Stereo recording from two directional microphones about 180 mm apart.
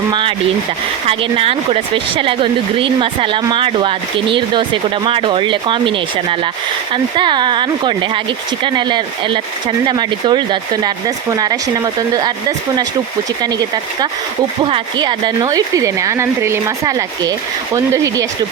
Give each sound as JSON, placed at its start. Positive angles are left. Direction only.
{"t": 0.1, "sound": "speech", "side_deg": -30}